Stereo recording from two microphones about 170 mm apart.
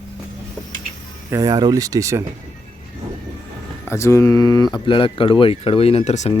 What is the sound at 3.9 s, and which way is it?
Speech, 15° left (ahead or behind).